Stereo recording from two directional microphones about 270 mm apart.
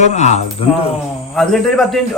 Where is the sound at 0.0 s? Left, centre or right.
Left.